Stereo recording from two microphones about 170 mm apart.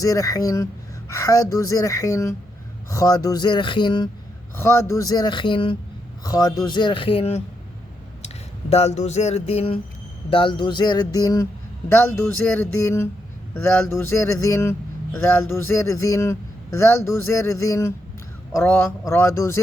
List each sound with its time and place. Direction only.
0.0 s speech: 20° left (ahead or behind); by 7.4 s 35° left (ahead or behind)
8.7 s a sound: 40° left (ahead or behind)
10.2 s speech: 30° left (ahead or behind)
12.5 s a man's voice: 10° left (ahead or behind)